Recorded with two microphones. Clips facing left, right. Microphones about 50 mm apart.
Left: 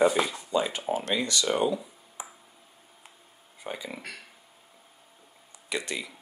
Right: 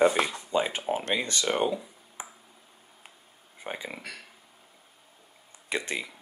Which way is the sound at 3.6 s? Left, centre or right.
Right.